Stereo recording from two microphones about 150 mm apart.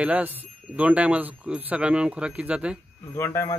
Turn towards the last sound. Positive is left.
turn(degrees=15)  # may be behind; listen again after turning